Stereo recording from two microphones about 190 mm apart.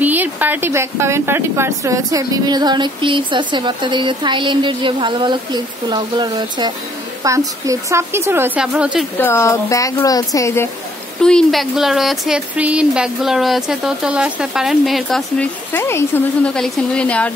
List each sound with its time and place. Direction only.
0.0 s a woman's voice: 10° right (ahead or behind)
9.2 s speech: 10° left (ahead or behind)
11.2 s speech: centre (ahead or behind)
16.5 s speech: 5° left (ahead or behind)